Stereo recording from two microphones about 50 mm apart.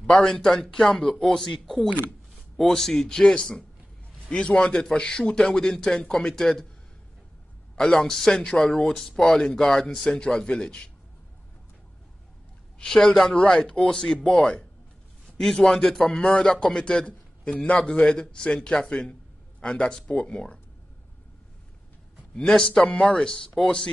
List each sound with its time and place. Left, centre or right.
0.0 s speech: centre
7.7 s speech: centre
12.7 s speech: centre
22.3 s speech: centre